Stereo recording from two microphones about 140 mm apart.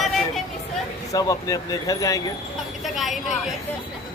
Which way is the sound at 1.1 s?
25° left (ahead or behind).